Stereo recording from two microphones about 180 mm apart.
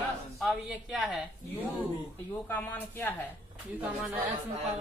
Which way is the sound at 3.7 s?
10° right (ahead or behind).